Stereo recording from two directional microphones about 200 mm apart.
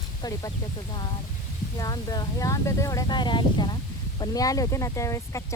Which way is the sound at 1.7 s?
20° left (ahead or behind).